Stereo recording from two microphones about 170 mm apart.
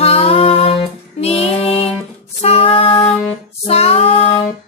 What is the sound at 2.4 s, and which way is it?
Female singing, 35° left (ahead or behind).